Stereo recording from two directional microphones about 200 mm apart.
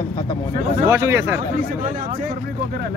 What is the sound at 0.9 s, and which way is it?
Speech, 15° right (ahead or behind).